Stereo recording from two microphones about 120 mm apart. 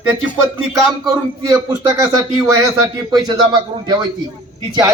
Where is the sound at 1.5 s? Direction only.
30° right (ahead or behind).